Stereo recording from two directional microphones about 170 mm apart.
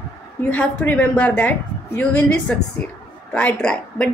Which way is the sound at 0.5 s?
10° left (ahead or behind).